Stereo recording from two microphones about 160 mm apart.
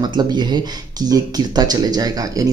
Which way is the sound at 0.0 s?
25° right (ahead or behind).